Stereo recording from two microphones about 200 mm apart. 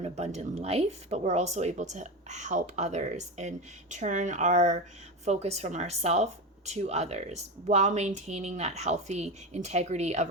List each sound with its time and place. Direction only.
0.0 s speech: 35° right (ahead or behind)